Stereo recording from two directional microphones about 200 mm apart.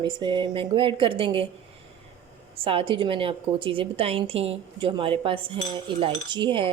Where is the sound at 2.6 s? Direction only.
25° right (ahead or behind).